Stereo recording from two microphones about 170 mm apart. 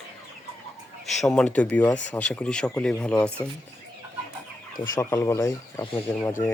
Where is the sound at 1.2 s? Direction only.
Centre (ahead or behind).